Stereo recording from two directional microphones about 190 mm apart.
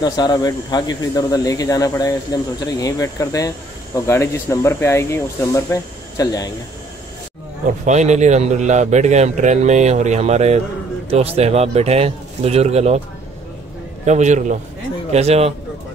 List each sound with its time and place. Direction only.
0.0 s speech: 20° left (ahead or behind)
7.8 s a man's voice: 40° right (ahead or behind)
14.0 s a man's voice: 40° right (ahead or behind)